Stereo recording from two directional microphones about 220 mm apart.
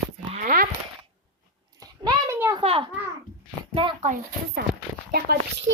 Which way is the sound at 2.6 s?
25° right (ahead or behind).